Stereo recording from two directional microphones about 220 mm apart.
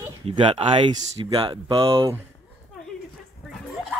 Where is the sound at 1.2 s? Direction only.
20° right (ahead or behind).